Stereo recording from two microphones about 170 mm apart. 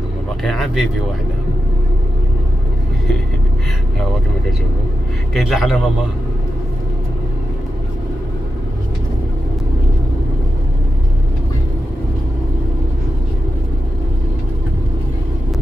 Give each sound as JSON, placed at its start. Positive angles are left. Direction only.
{"t": 0.4, "sound": "speech", "side_deg": 0}
{"t": 5.3, "sound": "speech", "side_deg": 0}